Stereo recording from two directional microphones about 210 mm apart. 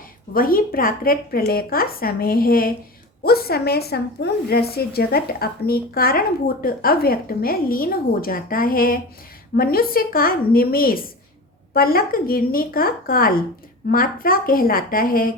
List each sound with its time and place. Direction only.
0.3 s a woman's voice: 45° left (ahead or behind)